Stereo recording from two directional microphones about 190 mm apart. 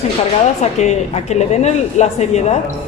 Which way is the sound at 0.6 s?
35° left (ahead or behind).